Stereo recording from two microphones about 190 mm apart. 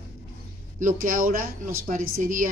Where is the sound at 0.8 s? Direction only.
45° right (ahead or behind).